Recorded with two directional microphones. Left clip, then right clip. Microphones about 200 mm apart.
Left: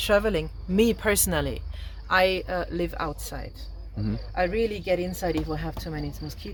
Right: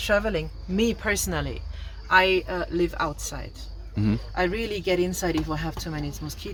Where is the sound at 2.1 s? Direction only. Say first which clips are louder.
Right 2 dB; 40° left (ahead or behind).